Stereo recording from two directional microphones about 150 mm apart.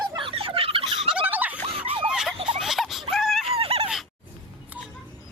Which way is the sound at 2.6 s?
Centre (ahead or behind).